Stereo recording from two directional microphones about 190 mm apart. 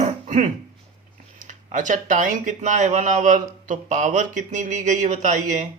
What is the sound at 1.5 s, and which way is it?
Speech, 40° right (ahead or behind).